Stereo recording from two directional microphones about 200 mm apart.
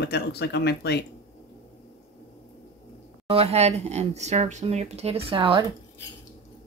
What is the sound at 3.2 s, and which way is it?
Speech, 30° right (ahead or behind).